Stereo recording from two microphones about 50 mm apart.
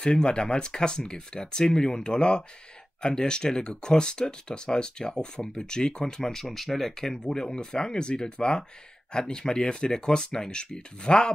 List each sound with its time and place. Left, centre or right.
0.0 s speech: centre